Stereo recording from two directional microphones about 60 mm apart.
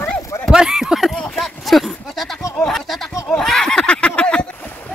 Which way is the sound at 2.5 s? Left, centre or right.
Centre.